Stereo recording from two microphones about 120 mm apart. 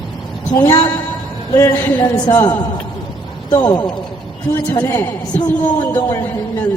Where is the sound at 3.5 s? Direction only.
35° left (ahead or behind); by 6.3 s 20° left (ahead or behind).